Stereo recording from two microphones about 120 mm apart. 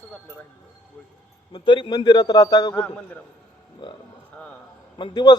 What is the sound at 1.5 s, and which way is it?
Speech, 40° left (ahead or behind).